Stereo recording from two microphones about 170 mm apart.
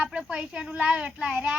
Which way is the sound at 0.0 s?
5° right (ahead or behind).